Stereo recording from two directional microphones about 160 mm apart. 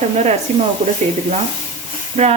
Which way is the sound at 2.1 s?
50° right (ahead or behind).